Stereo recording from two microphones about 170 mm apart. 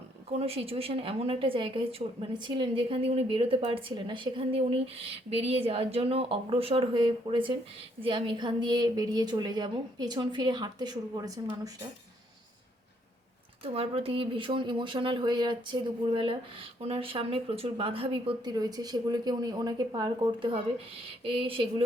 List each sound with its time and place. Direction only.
0.3 s a woman's voice: 35° right (ahead or behind)
13.7 s a woman's voice: 35° right (ahead or behind)